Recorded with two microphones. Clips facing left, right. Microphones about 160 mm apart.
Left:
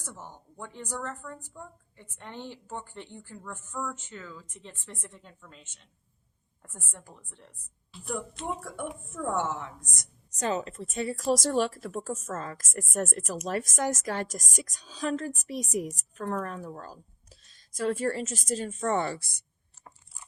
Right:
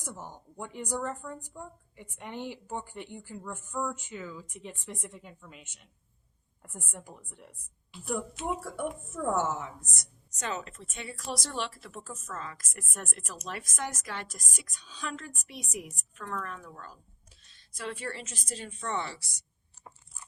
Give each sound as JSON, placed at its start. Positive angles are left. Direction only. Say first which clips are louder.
{"t": 0.0, "sound": "a woman's voice", "louder": "right 2 dB", "side_deg": -15}
{"t": 10.3, "sound": "a woman's voice", "louder": "left 6 dB", "side_deg": 35}